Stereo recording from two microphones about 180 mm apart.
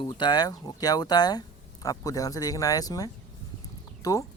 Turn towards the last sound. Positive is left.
turn(degrees=20)  # may be behind; listen again after turning